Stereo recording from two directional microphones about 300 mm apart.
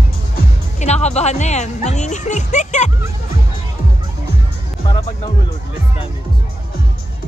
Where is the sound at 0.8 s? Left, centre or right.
Left.